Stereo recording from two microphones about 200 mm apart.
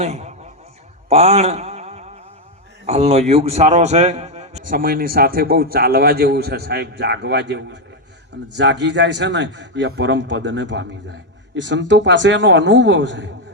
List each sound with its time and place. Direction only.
0.0 s a man's voice: 35° right (ahead or behind)
1.1 s a sound: 30° right (ahead or behind)
2.8 s a man's voice: 30° right (ahead or behind); by 13.3 s 65° right (ahead or behind)